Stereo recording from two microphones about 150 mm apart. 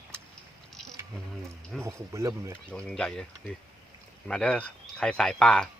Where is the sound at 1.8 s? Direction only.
20° right (ahead or behind).